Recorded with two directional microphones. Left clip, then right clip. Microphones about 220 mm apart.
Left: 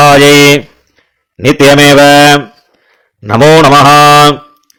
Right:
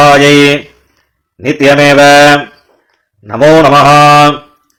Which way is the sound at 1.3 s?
40° left (ahead or behind).